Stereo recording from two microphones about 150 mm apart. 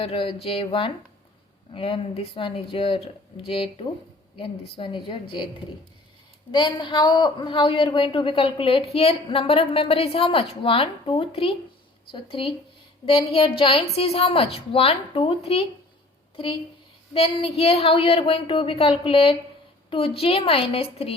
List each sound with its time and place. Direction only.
0.0 s a woman's voice: 35° left (ahead or behind)
6.5 s a woman's voice: 30° left (ahead or behind)
17.2 s a woman's voice: 40° left (ahead or behind)